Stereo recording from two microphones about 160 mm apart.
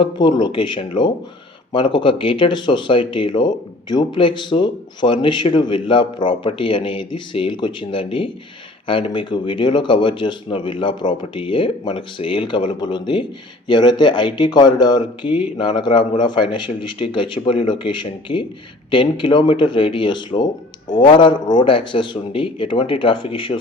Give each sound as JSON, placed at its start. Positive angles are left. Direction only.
{"t": 0.0, "sound": "speech", "side_deg": 30}